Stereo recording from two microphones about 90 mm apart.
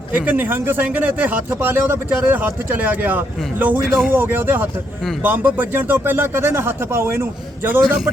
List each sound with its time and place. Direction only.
0.1 s speech: 20° right (ahead or behind)
3.8 s speech: centre (ahead or behind)
4.1 s speech: 25° right (ahead or behind)